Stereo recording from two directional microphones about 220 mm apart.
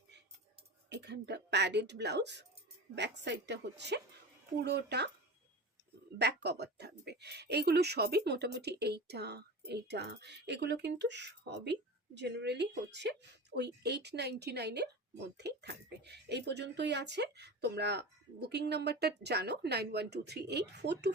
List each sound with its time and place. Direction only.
0.9 s speech: 50° right (ahead or behind)
6.1 s speech: 50° right (ahead or behind)